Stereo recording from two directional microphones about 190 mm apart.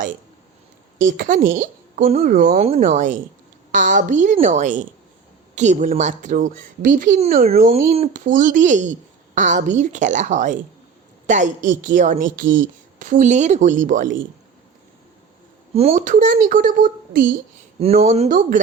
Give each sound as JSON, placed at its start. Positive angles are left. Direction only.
{"t": 0.9, "sound": "a woman's voice", "side_deg": -45}
{"t": 15.7, "sound": "a woman's voice", "side_deg": -35}
{"t": 17.7, "sound": "a woman's voice", "side_deg": -35}